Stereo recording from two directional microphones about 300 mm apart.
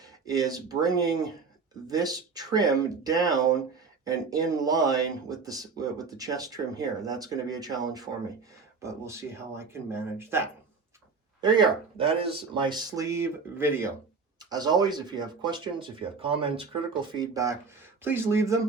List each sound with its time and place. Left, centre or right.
0.0 s speech: centre